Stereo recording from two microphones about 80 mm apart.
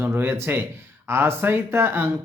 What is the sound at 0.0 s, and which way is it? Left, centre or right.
Speech, right.